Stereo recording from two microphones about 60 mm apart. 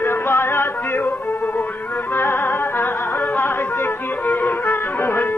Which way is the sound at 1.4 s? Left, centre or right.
Left.